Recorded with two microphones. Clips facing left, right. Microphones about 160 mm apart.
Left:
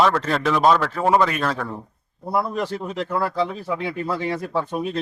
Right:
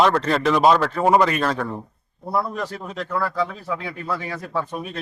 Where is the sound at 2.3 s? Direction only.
15° left (ahead or behind).